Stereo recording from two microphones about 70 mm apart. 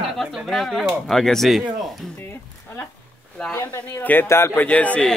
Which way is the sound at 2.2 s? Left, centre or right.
Left.